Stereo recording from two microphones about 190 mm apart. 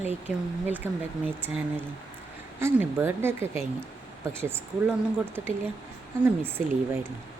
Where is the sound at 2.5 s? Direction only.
10° right (ahead or behind).